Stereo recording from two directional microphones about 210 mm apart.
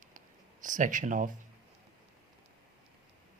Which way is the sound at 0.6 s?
35° right (ahead or behind).